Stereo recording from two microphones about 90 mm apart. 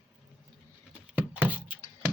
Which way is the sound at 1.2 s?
20° right (ahead or behind).